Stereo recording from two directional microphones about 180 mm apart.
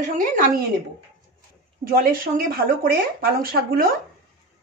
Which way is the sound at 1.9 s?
55° right (ahead or behind).